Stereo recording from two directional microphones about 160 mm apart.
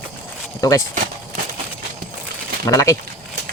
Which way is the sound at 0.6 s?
20° left (ahead or behind).